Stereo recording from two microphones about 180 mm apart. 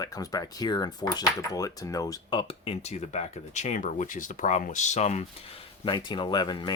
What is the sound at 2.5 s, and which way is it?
Speech, 35° left (ahead or behind).